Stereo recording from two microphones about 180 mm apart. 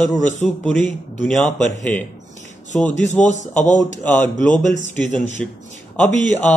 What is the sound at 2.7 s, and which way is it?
Speech, 40° left (ahead or behind).